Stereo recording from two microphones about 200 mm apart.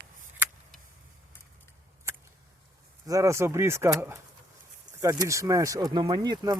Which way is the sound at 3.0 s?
15° right (ahead or behind).